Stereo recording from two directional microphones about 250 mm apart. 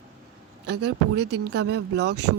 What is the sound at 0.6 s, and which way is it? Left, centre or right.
A woman's voice, right.